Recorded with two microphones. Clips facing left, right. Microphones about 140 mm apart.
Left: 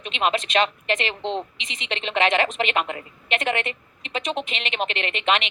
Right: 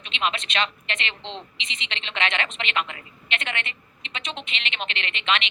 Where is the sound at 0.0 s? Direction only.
45° left (ahead or behind).